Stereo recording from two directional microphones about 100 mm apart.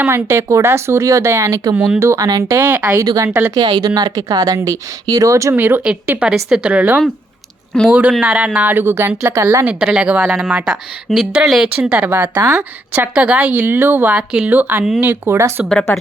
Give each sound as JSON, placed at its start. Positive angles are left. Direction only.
{"t": 0.0, "sound": "speech", "side_deg": -25}
{"t": 1.7, "sound": "speech", "side_deg": -15}
{"t": 2.0, "sound": "speech", "side_deg": -30}
{"t": 2.6, "sound": "speech", "side_deg": -20}
{"t": 2.9, "sound": "speech", "side_deg": -35}
{"t": 3.2, "sound": "speech", "side_deg": -20}
{"t": 3.5, "sound": "speech", "side_deg": -45}
{"t": 5.5, "sound": "speech", "side_deg": -20}
{"t": 9.6, "sound": "speech", "side_deg": -10}
{"t": 11.8, "sound": "speech", "side_deg": -15}
{"t": 12.9, "sound": "speech", "side_deg": -15}
{"t": 15.9, "sound": "speech", "side_deg": 20}